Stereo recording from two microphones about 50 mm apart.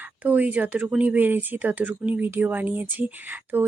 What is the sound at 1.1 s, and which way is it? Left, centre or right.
Speech, right.